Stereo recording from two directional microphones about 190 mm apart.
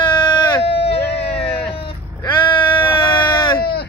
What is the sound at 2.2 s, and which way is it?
Bleat, 25° left (ahead or behind).